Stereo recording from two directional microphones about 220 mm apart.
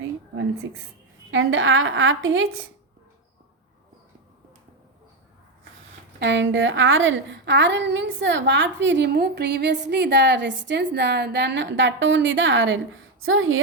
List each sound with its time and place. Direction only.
1.3 s a woman's voice: 65° right (ahead or behind)
6.1 s a woman's voice: 55° right (ahead or behind)